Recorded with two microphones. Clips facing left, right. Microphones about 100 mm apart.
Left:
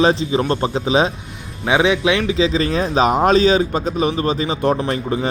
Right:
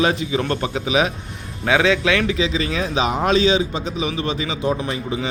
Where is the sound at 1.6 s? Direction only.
20° left (ahead or behind).